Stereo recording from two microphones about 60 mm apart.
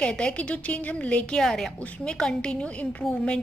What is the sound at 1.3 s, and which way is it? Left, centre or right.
A woman's voice, centre.